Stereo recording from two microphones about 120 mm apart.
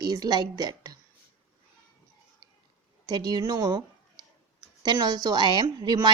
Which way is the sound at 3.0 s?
35° right (ahead or behind).